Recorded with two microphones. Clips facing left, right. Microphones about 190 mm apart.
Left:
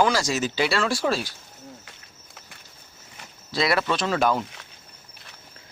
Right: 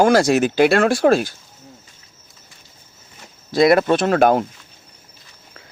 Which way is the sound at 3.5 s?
50° right (ahead or behind).